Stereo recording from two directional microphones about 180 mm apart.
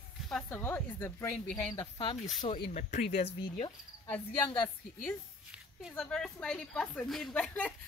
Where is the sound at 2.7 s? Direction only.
40° left (ahead or behind).